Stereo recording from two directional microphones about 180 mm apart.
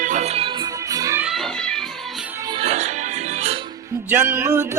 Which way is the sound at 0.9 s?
20° right (ahead or behind).